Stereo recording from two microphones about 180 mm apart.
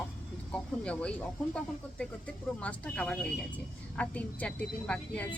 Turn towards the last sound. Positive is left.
turn(degrees=5)  # may be behind; listen again after turning